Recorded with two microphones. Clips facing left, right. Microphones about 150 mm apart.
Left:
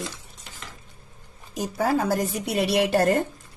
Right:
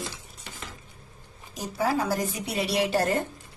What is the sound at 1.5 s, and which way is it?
Speech, 50° left (ahead or behind).